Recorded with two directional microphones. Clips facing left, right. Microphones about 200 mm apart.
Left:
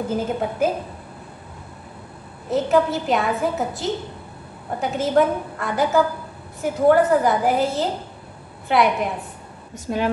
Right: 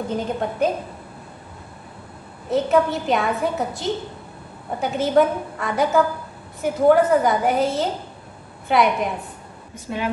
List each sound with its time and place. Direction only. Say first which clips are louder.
0.1 s a woman's voice: left 1 dB; 5° left (ahead or behind)
2.5 s a woman's voice: even; centre (ahead or behind)
9.9 s a woman's voice: left 4 dB; 40° left (ahead or behind)